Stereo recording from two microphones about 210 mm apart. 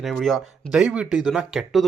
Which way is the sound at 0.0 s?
Centre (ahead or behind).